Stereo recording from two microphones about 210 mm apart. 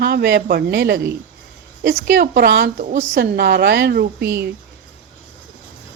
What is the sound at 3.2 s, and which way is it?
Speech, 55° right (ahead or behind).